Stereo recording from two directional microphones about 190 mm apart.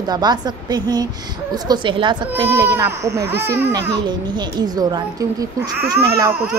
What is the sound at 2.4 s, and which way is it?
Speech, 15° right (ahead or behind).